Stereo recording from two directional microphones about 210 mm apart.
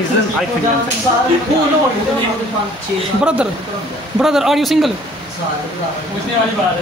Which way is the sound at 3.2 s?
5° right (ahead or behind).